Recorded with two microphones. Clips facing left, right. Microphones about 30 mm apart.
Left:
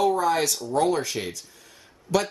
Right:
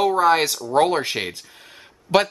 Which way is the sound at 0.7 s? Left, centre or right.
Right.